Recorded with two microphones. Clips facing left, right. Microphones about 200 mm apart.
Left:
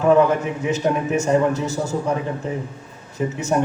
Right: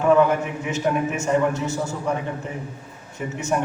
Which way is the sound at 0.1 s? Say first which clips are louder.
Left 2 dB; 35° left (ahead or behind).